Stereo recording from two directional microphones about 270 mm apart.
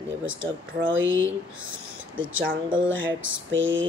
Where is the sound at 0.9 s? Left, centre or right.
Right.